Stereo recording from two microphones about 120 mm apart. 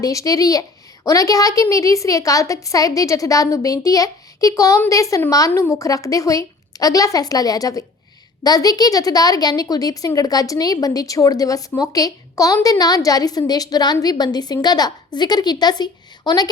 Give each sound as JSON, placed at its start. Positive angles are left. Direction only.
{"t": 0.0, "sound": "a woman's voice", "side_deg": 30}